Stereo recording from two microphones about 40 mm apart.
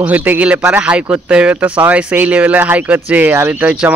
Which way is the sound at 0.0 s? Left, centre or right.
Right.